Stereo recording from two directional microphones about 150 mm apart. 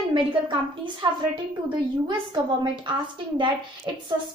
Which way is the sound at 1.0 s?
35° right (ahead or behind).